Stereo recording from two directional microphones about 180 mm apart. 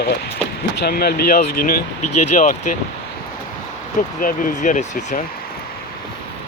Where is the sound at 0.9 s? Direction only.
60° left (ahead or behind).